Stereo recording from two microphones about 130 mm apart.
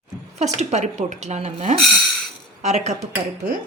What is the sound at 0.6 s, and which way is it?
A woman's voice, 60° right (ahead or behind).